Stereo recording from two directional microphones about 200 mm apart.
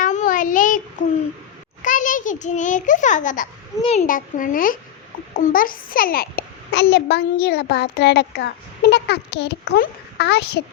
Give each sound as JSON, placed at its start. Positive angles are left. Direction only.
{"t": 0.0, "sound": "child singing", "side_deg": 40}
{"t": 1.8, "sound": "a child's voice", "side_deg": 40}